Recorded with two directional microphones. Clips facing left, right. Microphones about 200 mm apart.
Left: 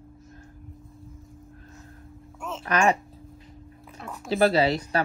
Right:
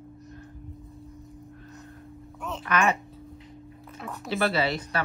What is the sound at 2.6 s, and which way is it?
Speech, 35° left (ahead or behind).